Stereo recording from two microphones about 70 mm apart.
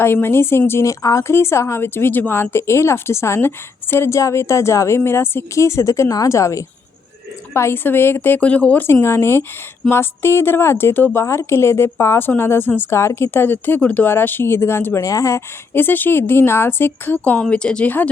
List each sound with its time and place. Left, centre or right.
0.0 s speech: left
0.7 s a woman's voice: left
1.3 s a woman's voice: left
7.5 s speech: left
8.4 s speech: centre
8.9 s speech: left
13.0 s speech: left
15.0 s a woman's voice: left
15.7 s speech: left
17.4 s speech: centre